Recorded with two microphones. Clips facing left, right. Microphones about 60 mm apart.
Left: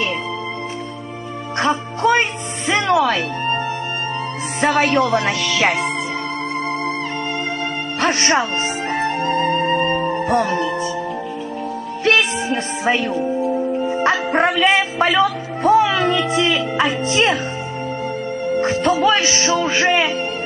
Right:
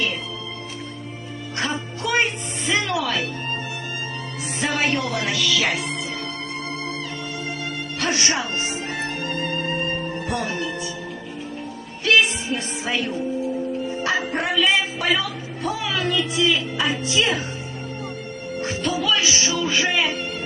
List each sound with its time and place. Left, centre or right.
2.0 s music: left
4.6 s speech: left
4.9 s music: left
8.0 s music: left
12.0 s music: left
16.3 s speech: left
17.0 s music: left
18.6 s music: left
19.0 s a man's voice: left